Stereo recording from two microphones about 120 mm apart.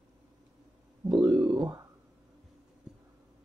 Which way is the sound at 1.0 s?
35° right (ahead or behind).